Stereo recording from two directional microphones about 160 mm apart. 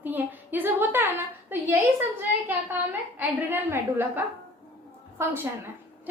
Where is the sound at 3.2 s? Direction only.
10° right (ahead or behind).